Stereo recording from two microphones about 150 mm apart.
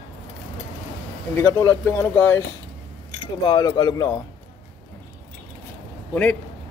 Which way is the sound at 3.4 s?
25° left (ahead or behind).